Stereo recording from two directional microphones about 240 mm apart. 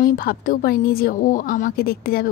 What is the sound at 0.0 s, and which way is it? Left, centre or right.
Speech, left.